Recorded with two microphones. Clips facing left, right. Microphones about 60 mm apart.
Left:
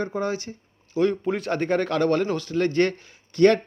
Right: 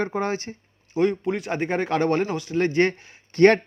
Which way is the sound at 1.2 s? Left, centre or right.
Centre.